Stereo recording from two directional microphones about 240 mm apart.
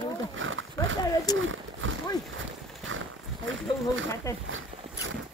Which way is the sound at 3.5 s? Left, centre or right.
Right.